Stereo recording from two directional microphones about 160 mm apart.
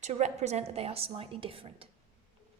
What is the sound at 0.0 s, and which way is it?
Speech, 45° right (ahead or behind).